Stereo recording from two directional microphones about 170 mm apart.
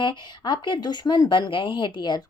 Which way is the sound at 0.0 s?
25° left (ahead or behind).